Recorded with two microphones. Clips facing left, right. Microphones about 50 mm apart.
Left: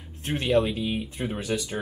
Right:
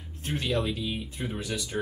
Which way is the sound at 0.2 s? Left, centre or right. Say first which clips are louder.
Left 6 dB; left.